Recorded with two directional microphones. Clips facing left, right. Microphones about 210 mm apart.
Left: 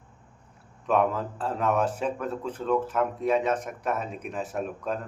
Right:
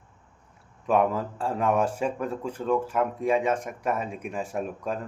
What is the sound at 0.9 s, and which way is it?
A man's voice, 10° right (ahead or behind).